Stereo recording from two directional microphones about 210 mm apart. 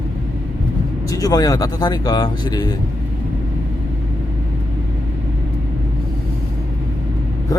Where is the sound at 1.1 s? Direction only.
15° left (ahead or behind).